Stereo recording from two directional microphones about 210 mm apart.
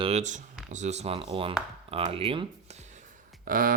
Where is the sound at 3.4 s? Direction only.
40° right (ahead or behind).